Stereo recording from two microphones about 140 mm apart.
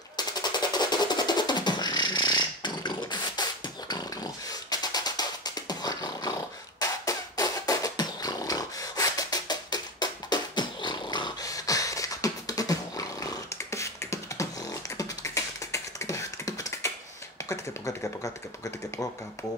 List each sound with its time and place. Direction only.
0.2 s music: 30° left (ahead or behind)
6.8 s a sound: 25° left (ahead or behind)
17.5 s speech: 25° left (ahead or behind)